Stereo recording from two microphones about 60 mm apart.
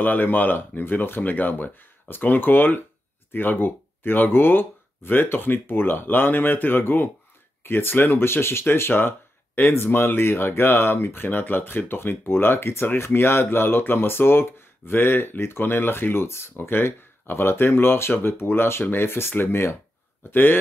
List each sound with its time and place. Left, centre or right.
0.0 s speech: left